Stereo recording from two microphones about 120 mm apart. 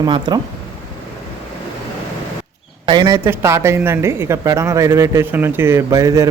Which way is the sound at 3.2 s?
25° right (ahead or behind).